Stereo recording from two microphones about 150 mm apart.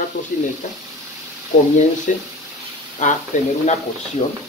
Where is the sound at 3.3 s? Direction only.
55° left (ahead or behind).